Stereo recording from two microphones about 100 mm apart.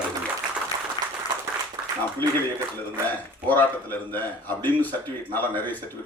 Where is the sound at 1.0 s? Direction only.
45° left (ahead or behind).